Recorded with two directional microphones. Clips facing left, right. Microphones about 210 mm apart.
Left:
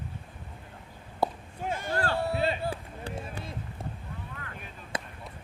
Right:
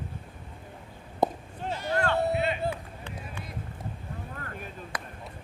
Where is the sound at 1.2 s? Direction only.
20° right (ahead or behind).